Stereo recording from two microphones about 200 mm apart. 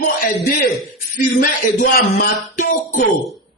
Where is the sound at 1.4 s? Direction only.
45° left (ahead or behind).